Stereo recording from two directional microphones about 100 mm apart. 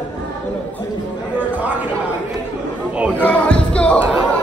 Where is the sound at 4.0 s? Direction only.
15° right (ahead or behind).